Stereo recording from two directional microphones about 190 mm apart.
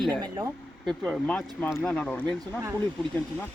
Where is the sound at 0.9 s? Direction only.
5° left (ahead or behind).